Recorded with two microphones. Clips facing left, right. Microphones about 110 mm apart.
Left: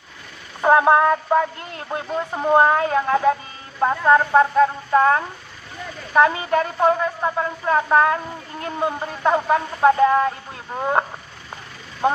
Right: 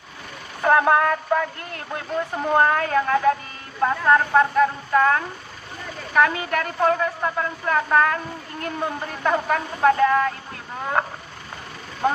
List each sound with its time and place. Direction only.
0.6 s a woman's voice: 20° left (ahead or behind)